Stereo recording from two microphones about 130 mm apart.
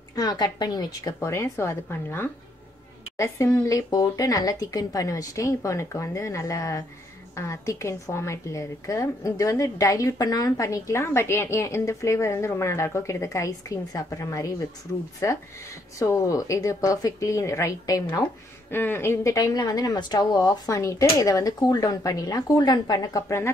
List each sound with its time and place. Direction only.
0.1 s a woman's voice: 30° left (ahead or behind)